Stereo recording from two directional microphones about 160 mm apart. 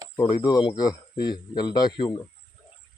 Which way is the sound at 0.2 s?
30° left (ahead or behind).